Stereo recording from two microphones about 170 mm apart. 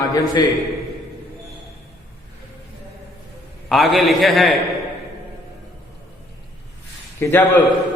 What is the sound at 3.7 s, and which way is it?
Speech, centre (ahead or behind).